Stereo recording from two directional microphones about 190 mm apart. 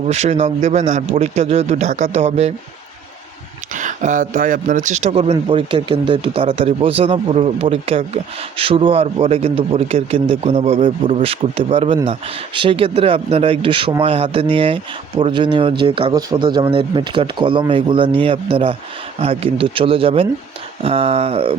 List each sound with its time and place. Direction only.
0.1 s a man's voice: 35° right (ahead or behind)
3.8 s a man's voice: 40° right (ahead or behind)